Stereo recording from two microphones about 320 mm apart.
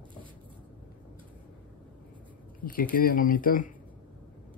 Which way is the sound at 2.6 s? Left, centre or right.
Left.